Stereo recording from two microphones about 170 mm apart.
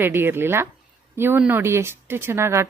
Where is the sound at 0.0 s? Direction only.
15° right (ahead or behind).